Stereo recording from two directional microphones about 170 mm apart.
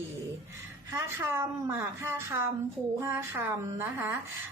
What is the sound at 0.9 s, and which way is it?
Speech, 15° right (ahead or behind).